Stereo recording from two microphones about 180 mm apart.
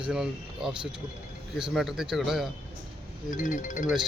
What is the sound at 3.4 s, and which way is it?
Speech, 45° left (ahead or behind).